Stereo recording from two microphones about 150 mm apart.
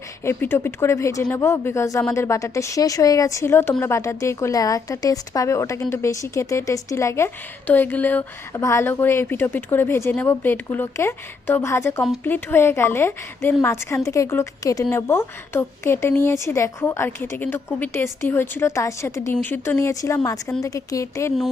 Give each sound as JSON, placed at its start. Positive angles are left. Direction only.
{"t": 0.3, "sound": "a woman's voice", "side_deg": 15}